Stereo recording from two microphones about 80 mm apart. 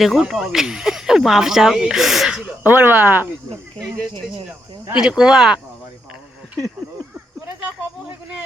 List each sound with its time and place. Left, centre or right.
0.0 s speech: centre
2.6 s speech: right
4.9 s speech: centre